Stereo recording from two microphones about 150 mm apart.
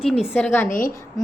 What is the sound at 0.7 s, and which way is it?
Speech, 60° left (ahead or behind).